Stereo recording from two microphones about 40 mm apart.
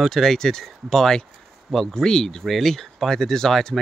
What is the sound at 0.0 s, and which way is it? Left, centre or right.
Speech, centre.